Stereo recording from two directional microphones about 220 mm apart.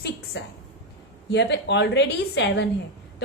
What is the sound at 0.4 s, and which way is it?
A woman's voice, 50° left (ahead or behind).